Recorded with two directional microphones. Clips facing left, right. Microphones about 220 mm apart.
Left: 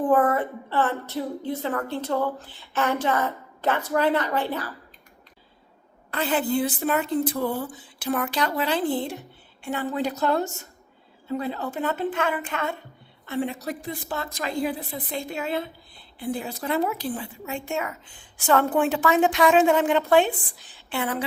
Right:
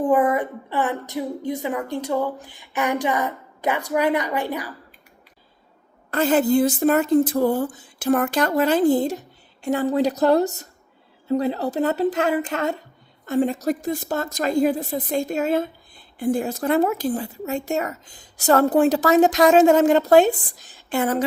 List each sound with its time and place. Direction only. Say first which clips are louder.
0.0 s music: right 2 dB; 15° right (ahead or behind)
6.1 s a woman's voice: right 7 dB; 45° right (ahead or behind)